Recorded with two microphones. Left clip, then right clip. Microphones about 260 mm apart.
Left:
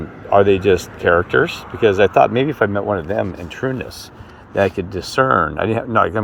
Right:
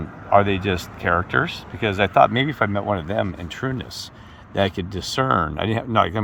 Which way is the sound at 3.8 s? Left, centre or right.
Right.